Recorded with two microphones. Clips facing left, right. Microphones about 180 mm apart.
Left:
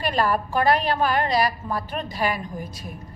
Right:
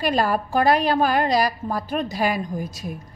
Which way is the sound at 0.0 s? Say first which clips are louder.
Right 2 dB; 40° right (ahead or behind).